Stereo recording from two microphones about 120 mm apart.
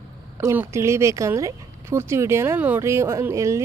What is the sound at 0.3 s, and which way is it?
A woman's voice, 15° right (ahead or behind).